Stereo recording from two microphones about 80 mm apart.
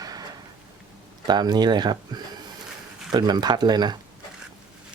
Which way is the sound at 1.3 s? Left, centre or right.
Right.